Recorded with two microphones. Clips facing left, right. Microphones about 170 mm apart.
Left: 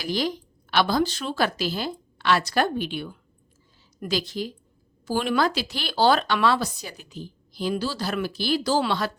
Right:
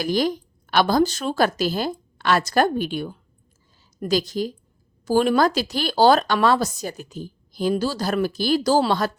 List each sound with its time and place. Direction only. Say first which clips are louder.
0.0 s speech: right 5 dB; 50° right (ahead or behind)